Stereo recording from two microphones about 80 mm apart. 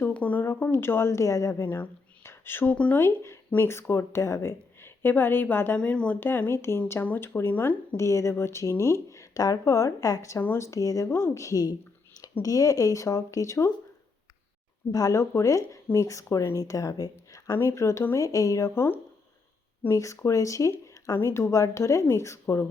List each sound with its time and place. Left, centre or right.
0.0 s a sound: centre
0.4 s speech: left
1.6 s speech: left
2.7 s speech: centre
3.0 s speech: left
6.1 s speech: left
14.9 s speech: left
19.9 s speech: left